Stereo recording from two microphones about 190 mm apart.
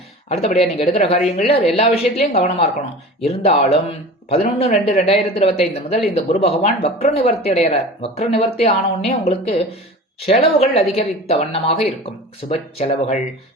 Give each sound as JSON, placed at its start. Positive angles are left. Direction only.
{"t": 0.3, "sound": "speech", "side_deg": 35}